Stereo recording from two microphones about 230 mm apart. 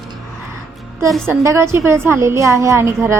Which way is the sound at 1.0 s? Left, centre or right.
Centre.